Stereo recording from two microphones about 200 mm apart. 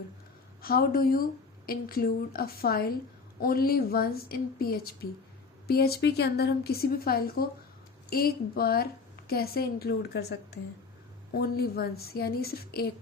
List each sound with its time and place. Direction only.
0.6 s a woman's voice: 50° left (ahead or behind)